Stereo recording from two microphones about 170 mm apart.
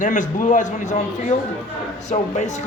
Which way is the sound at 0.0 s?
50° left (ahead or behind).